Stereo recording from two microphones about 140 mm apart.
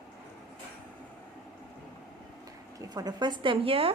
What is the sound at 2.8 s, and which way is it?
Speech, 25° right (ahead or behind).